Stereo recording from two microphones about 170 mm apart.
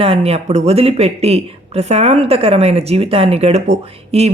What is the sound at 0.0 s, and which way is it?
Speech, 35° right (ahead or behind).